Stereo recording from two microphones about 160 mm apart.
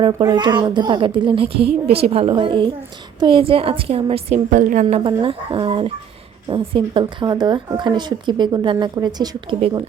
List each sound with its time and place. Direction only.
0.1 s a woman's voice: 25° right (ahead or behind)
4.4 s a woman's voice: 55° right (ahead or behind); by 9.6 s 25° right (ahead or behind)